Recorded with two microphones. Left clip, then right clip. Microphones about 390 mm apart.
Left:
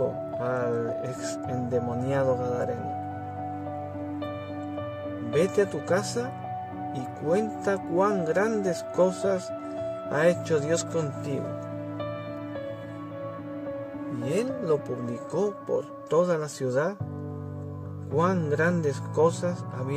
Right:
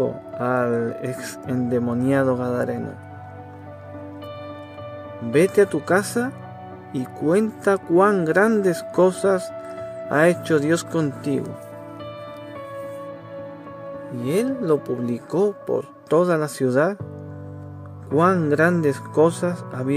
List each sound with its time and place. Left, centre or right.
0.4 s speech: right
5.3 s speech: right
14.2 s speech: right
18.1 s speech: centre